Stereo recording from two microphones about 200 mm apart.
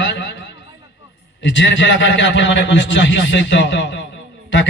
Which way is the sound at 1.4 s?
65° left (ahead or behind).